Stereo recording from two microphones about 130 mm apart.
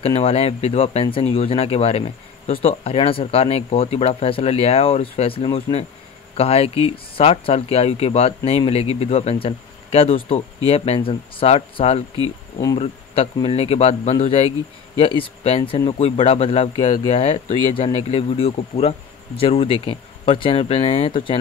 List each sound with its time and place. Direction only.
0.0 s speech: 50° left (ahead or behind)